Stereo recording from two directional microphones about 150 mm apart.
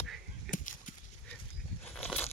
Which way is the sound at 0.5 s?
60° left (ahead or behind).